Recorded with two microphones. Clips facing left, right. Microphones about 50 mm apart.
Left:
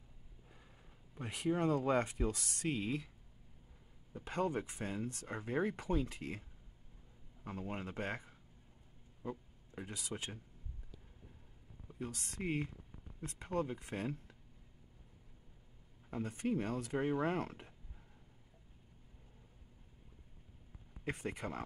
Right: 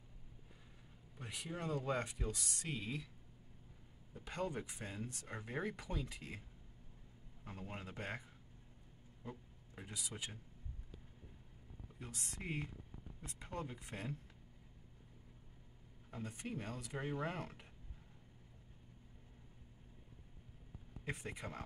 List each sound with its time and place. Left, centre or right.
1.2 s speech: left
4.1 s speech: left
5.3 s speech: left
7.4 s speech: left
9.2 s a sound: left
9.8 s speech: left
12.4 s speech: centre
13.7 s speech: left
16.1 s speech: left
21.0 s speech: left